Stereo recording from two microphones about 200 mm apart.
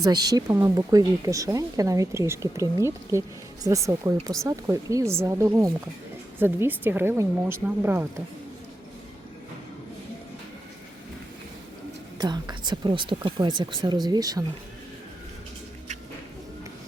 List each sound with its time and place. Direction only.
0.0 s speech: 20° right (ahead or behind)
12.2 s a woman's voice: 20° right (ahead or behind)